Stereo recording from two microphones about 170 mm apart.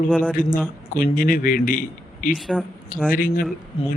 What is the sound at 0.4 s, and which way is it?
A man's voice, 55° left (ahead or behind).